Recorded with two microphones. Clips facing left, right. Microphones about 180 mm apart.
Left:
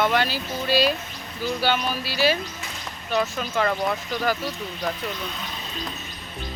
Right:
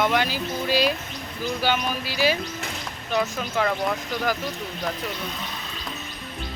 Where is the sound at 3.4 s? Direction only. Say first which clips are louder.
Left 1 dB; 5° right (ahead or behind).